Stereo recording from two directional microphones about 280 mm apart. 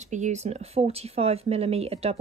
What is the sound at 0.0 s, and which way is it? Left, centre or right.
Speech, right.